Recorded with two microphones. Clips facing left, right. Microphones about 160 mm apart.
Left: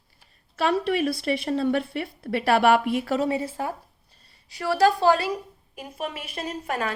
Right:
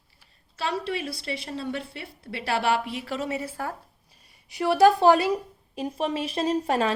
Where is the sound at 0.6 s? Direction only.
55° left (ahead or behind); by 3.4 s 40° left (ahead or behind).